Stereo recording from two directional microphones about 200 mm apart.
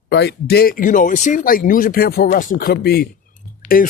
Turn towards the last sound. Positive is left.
turn(degrees=45)  # may be behind; listen again after turning